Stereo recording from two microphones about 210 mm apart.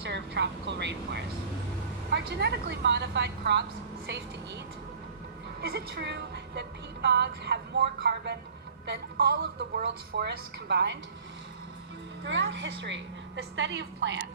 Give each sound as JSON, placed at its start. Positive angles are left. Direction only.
{"t": 0.0, "sound": "a woman's voice", "side_deg": -55}
{"t": 5.6, "sound": "a woman's voice", "side_deg": -50}
{"t": 12.2, "sound": "a woman's voice", "side_deg": -60}